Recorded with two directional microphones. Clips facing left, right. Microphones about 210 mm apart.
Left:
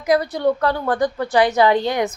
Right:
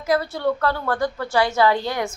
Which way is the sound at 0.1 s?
15° left (ahead or behind).